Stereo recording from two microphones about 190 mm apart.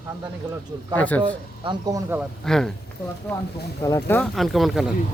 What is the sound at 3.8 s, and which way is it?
Speech, 15° left (ahead or behind).